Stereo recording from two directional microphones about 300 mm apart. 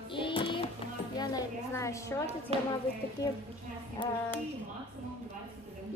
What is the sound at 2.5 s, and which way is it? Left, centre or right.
Speech, centre.